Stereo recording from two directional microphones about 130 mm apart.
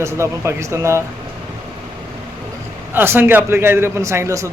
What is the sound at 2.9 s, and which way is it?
A man's voice, 15° right (ahead or behind).